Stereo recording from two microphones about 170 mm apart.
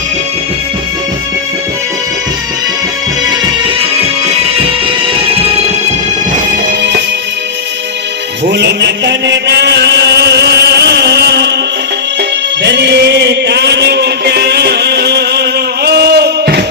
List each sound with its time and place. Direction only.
8.4 s chant: 75° right (ahead or behind)
12.6 s chant: 90° right; by 16.6 s 70° right (ahead or behind)